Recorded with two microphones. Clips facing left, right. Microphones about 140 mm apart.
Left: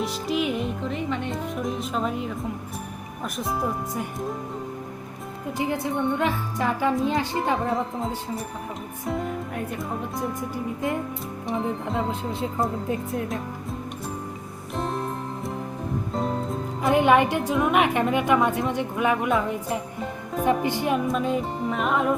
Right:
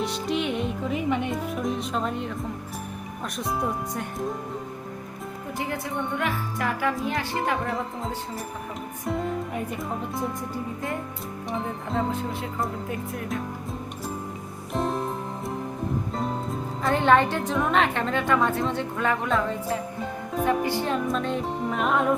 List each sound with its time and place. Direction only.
0.0 s music: centre (ahead or behind)
3.3 s music: centre (ahead or behind)
5.5 s speech: 20° left (ahead or behind)
9.0 s speech: centre (ahead or behind)
11.4 s music: centre (ahead or behind)
12.3 s speech: 25° left (ahead or behind)
14.7 s music: centre (ahead or behind)
16.8 s a woman's voice: 10° left (ahead or behind)
21.1 s music: 5° left (ahead or behind)